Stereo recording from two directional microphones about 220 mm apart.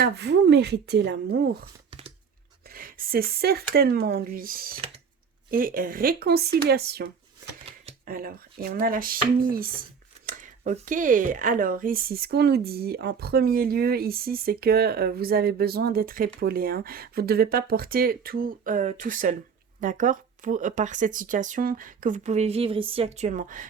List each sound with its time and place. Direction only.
0.0 s speech: 50° right (ahead or behind)
1.9 s a sound: 25° right (ahead or behind)
2.6 s speech: 40° right (ahead or behind)